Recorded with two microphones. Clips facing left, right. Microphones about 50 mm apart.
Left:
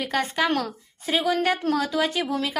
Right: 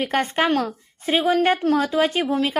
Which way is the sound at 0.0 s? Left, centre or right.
Right.